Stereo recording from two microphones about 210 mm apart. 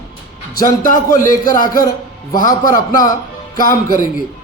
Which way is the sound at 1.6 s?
15° left (ahead or behind).